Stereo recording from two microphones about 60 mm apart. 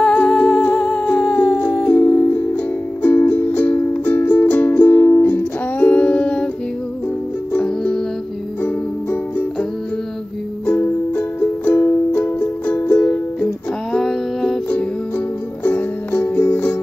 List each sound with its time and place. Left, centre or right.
0.0 s humming: centre
3.9 s music: left
7.6 s music: centre
8.6 s music: left
11.1 s music: left
13.9 s music: centre
15.1 s music: left